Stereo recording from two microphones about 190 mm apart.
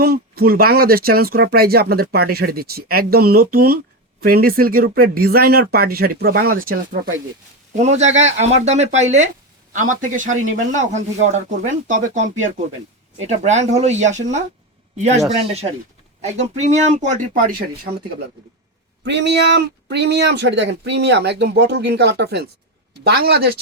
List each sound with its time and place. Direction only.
0.0 s speech: 55° right (ahead or behind)
7.8 s speech: 35° right (ahead or behind)
16.2 s speech: 35° right (ahead or behind)
19.0 s speech: 65° right (ahead or behind)